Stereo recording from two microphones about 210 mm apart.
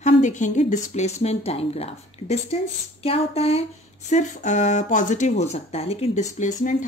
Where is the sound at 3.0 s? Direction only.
30° left (ahead or behind).